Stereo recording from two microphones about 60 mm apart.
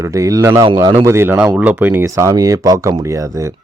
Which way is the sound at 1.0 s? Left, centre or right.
Right.